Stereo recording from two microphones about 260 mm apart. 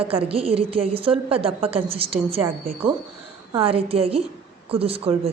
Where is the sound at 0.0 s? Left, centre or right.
Right.